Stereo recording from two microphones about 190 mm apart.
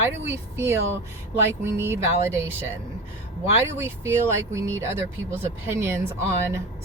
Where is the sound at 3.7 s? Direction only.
10° right (ahead or behind).